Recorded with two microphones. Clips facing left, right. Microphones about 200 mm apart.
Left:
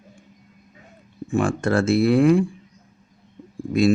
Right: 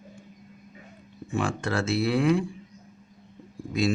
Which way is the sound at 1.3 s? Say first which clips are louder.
Left 7 dB; 50° left (ahead or behind).